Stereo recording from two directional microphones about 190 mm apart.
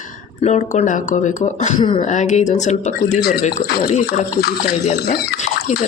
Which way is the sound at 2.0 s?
40° left (ahead or behind).